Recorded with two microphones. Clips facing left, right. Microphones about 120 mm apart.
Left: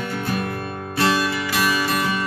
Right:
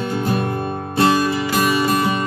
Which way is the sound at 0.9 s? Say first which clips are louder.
Right 4 dB; 30° right (ahead or behind).